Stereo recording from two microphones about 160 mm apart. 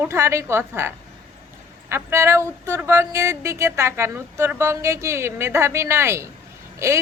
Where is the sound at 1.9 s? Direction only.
15° right (ahead or behind).